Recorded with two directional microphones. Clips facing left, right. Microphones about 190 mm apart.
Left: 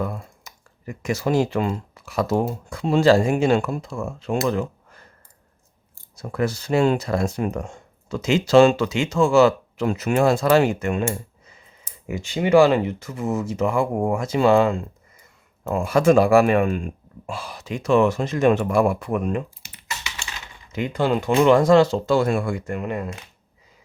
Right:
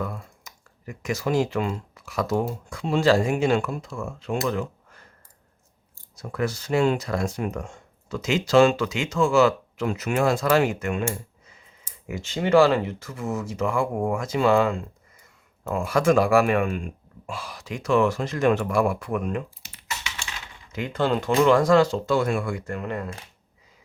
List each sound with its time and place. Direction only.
0.0 s speech: 30° left (ahead or behind)
6.1 s speech: 30° left (ahead or behind)
12.0 s speech: 15° left (ahead or behind)
19.6 s typing: 15° left (ahead or behind)
20.7 s speech: 15° left (ahead or behind)